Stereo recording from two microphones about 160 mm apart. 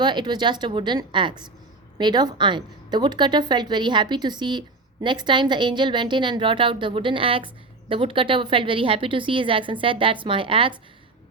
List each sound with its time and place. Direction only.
0.0 s a woman's voice: 30° right (ahead or behind)